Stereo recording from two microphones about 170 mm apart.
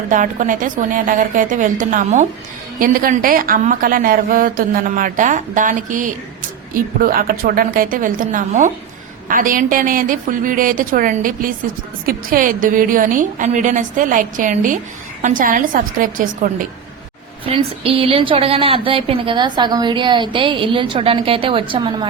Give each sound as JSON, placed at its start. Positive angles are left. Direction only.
{"t": 0.1, "sound": "a woman's voice", "side_deg": -50}
{"t": 17.4, "sound": "a woman's voice", "side_deg": -35}